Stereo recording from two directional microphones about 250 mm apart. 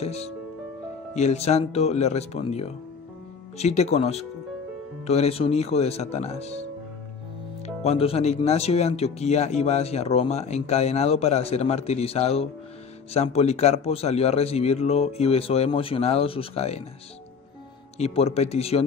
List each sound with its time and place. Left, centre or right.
0.0 s music: left
1.1 s speech: left
7.6 s speech: left
17.9 s speech: left